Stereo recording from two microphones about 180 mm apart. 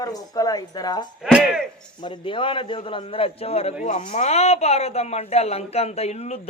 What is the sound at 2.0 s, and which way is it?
Speech, 30° left (ahead or behind).